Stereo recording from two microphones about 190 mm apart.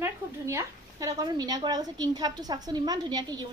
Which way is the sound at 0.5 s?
15° right (ahead or behind).